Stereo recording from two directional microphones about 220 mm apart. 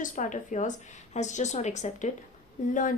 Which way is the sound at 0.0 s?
35° left (ahead or behind).